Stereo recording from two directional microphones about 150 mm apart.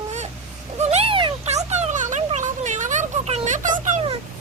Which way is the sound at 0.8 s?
45° right (ahead or behind).